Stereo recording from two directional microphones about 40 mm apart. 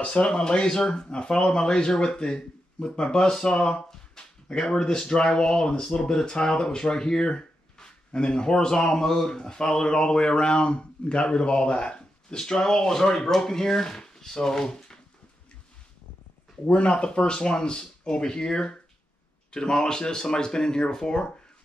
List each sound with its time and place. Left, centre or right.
0.0 s speech: left; by 15.0 s centre
16.6 s speech: left